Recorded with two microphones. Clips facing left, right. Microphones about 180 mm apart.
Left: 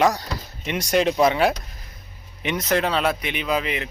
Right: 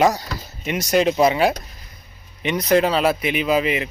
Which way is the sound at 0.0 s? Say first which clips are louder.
Right 2 dB; 5° right (ahead or behind).